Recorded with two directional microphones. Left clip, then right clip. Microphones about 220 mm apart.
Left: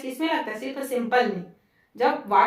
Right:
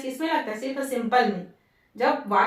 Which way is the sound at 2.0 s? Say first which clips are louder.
Left 2 dB; 40° left (ahead or behind).